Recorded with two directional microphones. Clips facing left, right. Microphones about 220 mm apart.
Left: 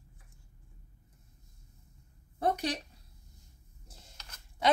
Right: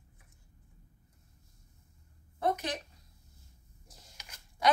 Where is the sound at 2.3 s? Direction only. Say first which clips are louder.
Left 1 dB; 35° left (ahead or behind).